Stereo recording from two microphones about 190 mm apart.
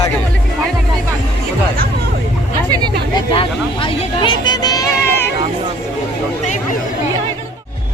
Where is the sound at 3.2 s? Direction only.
25° left (ahead or behind).